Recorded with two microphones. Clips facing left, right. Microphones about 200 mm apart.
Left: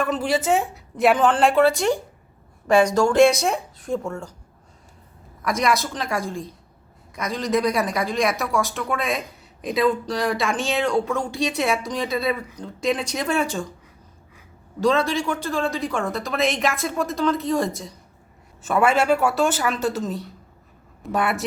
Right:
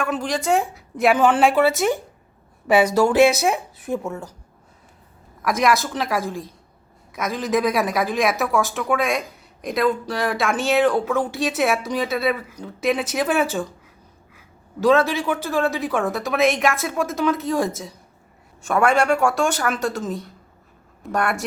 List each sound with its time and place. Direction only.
0.0 s a woman's voice: 5° left (ahead or behind)
5.4 s a woman's voice: centre (ahead or behind)
14.8 s a woman's voice: 5° right (ahead or behind)